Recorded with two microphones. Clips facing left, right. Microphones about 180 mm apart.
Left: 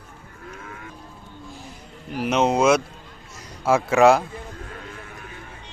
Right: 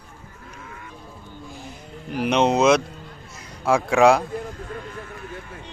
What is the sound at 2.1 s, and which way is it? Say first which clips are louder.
Speech: right 1 dB; 5° left (ahead or behind).